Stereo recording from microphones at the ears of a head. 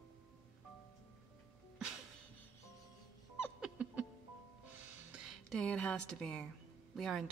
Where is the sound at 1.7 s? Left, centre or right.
Right.